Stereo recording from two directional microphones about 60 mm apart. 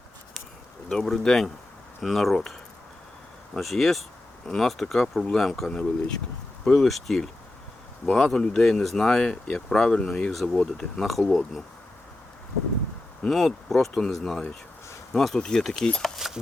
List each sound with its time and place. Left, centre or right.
0.9 s speech: centre
13.2 s speech: centre